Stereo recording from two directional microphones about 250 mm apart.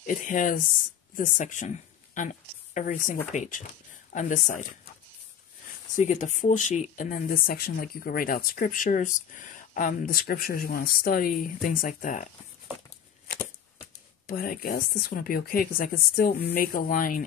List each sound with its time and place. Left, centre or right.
0.0 s a woman's voice: left
5.9 s speech: left
13.3 s a sound: left
14.2 s speech: left